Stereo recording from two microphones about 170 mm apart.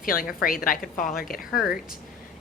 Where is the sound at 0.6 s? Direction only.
55° left (ahead or behind).